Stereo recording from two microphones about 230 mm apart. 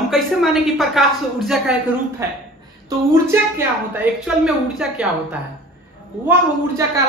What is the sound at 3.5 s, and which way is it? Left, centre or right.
A woman's voice, centre.